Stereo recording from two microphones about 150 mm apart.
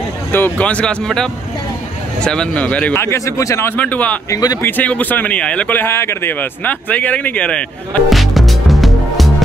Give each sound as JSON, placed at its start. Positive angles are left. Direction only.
{"t": 0.3, "sound": "speech", "side_deg": 10}
{"t": 4.3, "sound": "speech", "side_deg": 25}
{"t": 4.6, "sound": "a man's voice", "side_deg": 10}